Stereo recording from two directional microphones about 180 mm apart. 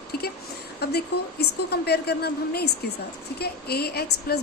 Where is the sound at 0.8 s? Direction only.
65° left (ahead or behind).